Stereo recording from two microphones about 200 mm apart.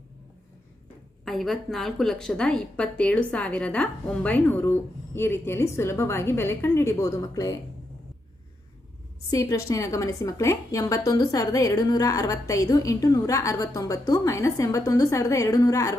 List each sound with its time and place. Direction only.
1.2 s a woman's voice: centre (ahead or behind); by 7.5 s 15° left (ahead or behind)
9.3 s a woman's voice: 15° left (ahead or behind)